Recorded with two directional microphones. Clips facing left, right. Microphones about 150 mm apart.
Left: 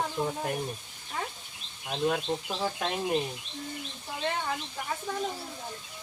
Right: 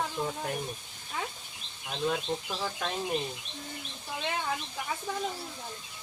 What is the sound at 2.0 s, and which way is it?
Speech, 20° left (ahead or behind).